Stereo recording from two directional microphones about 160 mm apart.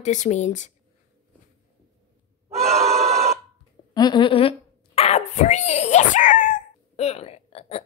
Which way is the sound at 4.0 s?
30° left (ahead or behind).